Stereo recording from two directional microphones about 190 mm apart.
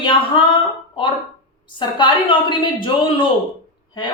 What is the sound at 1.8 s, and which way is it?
Speech, 25° left (ahead or behind).